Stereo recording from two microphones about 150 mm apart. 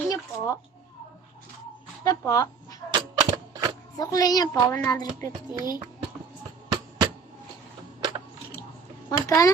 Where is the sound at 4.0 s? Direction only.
25° left (ahead or behind).